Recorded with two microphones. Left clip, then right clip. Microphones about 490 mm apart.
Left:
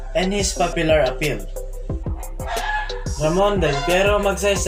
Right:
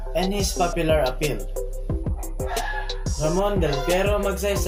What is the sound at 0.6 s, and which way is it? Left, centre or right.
Music, right.